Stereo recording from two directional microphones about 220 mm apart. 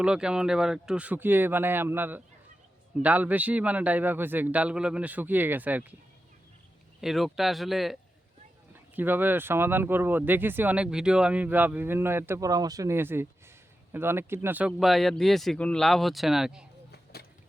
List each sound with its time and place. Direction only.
0.0 s speech: 5° right (ahead or behind)
7.0 s speech: centre (ahead or behind)
16.9 s vehicle: 45° left (ahead or behind)